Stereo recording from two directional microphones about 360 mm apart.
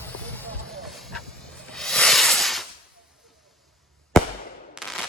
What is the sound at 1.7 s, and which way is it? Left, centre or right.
Hiss, centre.